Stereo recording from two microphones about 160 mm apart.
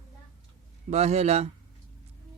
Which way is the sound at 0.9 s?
45° right (ahead or behind).